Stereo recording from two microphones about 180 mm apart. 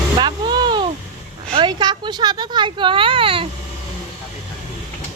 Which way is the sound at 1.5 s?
25° right (ahead or behind).